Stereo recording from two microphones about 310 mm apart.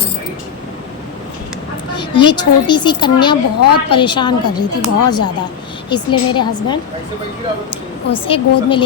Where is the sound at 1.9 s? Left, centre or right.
Centre.